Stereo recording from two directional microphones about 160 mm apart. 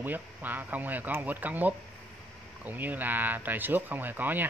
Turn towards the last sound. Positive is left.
turn(degrees=-10)  # may be behind; listen again after turning